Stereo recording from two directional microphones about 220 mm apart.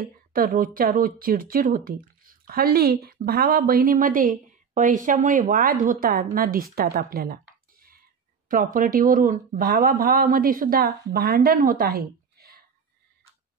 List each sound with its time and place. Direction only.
0.3 s speech: 40° right (ahead or behind)
8.5 s speech: 40° right (ahead or behind)